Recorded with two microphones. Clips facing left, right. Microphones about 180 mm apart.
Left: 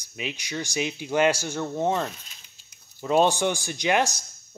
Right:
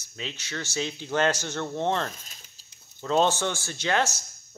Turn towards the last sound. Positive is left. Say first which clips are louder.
# left 3 dB
turn(degrees=15)  # may be behind; listen again after turning